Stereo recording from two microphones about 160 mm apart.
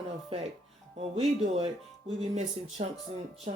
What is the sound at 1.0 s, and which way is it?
Speech, 40° right (ahead or behind).